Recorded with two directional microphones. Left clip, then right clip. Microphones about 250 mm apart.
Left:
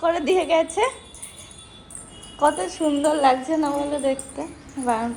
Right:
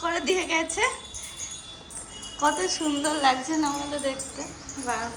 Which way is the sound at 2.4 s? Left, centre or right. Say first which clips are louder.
Left 4 dB; centre.